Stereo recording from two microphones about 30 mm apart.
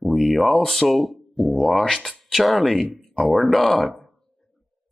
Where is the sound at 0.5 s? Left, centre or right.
Centre.